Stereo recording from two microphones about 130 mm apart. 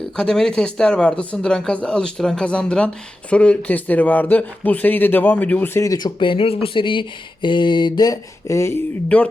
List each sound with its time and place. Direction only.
0.2 s speech: 5° left (ahead or behind); by 6.1 s 25° left (ahead or behind)
6.1 s speech: 40° left (ahead or behind); by 8.8 s 20° left (ahead or behind)
9.0 s speech: 10° left (ahead or behind)